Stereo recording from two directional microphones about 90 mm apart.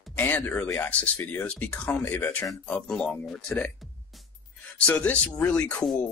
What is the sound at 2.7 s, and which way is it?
Speech, 10° left (ahead or behind).